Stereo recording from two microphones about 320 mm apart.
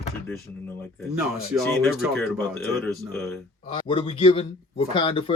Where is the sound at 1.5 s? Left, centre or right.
Centre.